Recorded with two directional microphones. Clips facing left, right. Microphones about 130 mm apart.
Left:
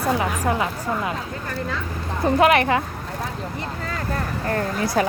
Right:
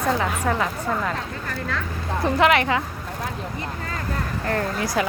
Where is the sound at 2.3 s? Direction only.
45° left (ahead or behind).